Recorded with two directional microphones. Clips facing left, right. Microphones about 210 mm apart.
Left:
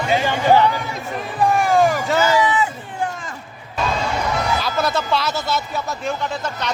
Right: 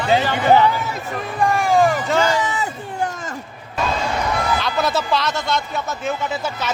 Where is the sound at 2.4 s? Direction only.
40° right (ahead or behind).